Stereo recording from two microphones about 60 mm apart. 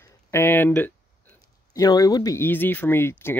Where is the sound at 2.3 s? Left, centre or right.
Left.